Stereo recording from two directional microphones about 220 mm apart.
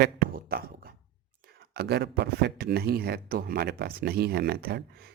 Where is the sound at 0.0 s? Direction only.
45° right (ahead or behind).